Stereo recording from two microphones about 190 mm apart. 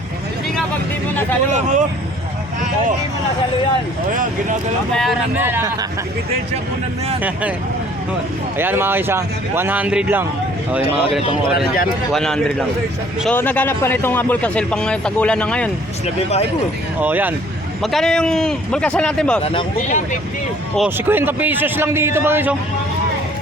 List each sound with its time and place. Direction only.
1.5 s speech: 40° right (ahead or behind)
4.1 s speech: 45° right (ahead or behind)
5.4 s a man's voice: 10° right (ahead or behind)
7.2 s a man's voice: 10° right (ahead or behind)
8.5 s a man's voice: 10° right (ahead or behind)
12.1 s a man's voice: centre (ahead or behind)
16.0 s speech: 35° left (ahead or behind)
17.0 s a man's voice: 10° right (ahead or behind)
17.9 s a man's voice: 5° left (ahead or behind)
19.5 s speech: 35° left (ahead or behind)
20.7 s a man's voice: 10° right (ahead or behind)